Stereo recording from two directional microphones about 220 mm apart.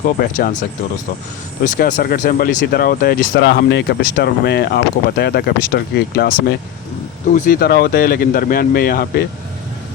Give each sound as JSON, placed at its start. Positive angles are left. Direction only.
{"t": 0.2, "sound": "speech", "side_deg": 40}
{"t": 1.6, "sound": "speech", "side_deg": 35}
{"t": 7.3, "sound": "speech", "side_deg": 40}